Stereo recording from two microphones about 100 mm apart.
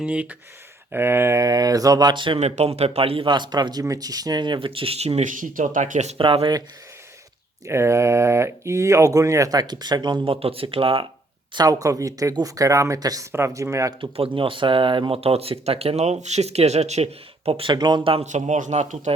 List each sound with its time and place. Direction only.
0.0 s speech: 10° right (ahead or behind); by 2.4 s 55° right (ahead or behind)
2.4 s speech: 90° right
6.1 s speech: 65° right (ahead or behind)
7.7 s speech: 30° right (ahead or behind); by 10.3 s 50° right (ahead or behind)
10.4 s speech: 65° right (ahead or behind)
11.5 s speech: 40° right (ahead or behind)
14.0 s speech: 60° right (ahead or behind); by 17.7 s 80° right
17.7 s speech: 45° right (ahead or behind)
18.0 s speech: 65° right (ahead or behind)